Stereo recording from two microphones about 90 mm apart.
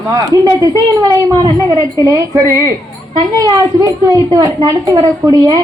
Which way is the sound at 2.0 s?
35° right (ahead or behind).